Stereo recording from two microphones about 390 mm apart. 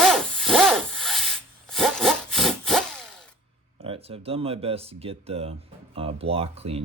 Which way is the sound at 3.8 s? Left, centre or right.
Centre.